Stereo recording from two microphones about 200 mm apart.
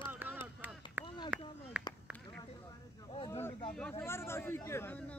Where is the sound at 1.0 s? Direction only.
20° left (ahead or behind).